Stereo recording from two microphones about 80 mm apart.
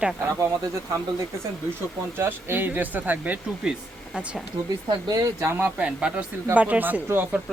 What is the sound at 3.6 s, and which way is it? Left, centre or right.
Speech, centre.